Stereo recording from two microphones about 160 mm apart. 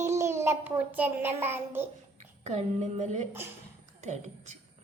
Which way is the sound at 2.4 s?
45° right (ahead or behind).